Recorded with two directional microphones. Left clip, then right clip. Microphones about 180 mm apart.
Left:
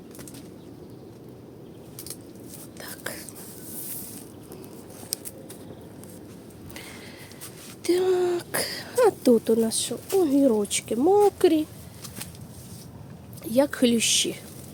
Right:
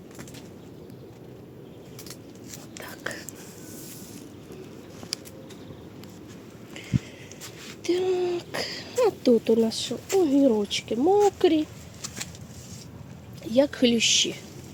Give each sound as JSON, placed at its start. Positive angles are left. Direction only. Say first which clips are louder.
{"t": 2.8, "sound": "whispering", "louder": "right 1 dB", "side_deg": -20}
{"t": 7.9, "sound": "a sound", "louder": "left 3 dB", "side_deg": 15}
{"t": 9.4, "sound": "speech", "louder": "right 1 dB", "side_deg": 0}
{"t": 13.4, "sound": "speech", "louder": "even", "side_deg": 0}